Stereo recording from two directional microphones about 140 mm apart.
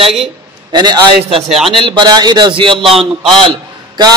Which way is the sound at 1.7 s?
35° right (ahead or behind).